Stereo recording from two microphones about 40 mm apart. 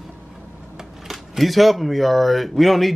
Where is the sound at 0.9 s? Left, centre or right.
Centre.